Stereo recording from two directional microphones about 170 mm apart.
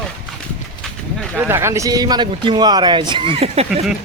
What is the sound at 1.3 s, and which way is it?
A man's voice, 15° right (ahead or behind).